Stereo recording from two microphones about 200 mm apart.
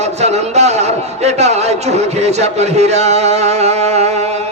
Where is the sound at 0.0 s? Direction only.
35° right (ahead or behind).